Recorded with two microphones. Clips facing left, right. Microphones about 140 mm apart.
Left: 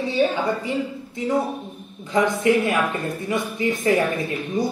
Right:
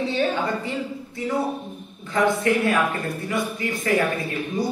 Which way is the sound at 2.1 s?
20° left (ahead or behind).